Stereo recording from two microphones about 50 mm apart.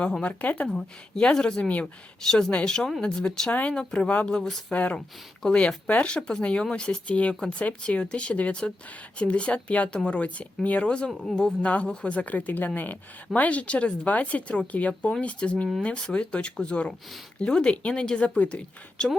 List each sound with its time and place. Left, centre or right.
0.2 s speech: left
0.7 s speech: centre
3.5 s speech: left
4.9 s speech: centre
5.5 s speech: left
11.6 s speech: left